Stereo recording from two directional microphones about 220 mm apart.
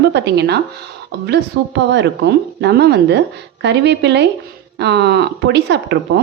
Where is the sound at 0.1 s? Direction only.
50° right (ahead or behind).